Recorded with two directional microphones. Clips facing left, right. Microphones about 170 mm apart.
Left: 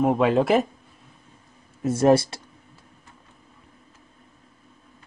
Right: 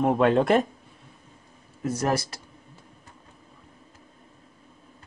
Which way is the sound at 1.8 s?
25° left (ahead or behind).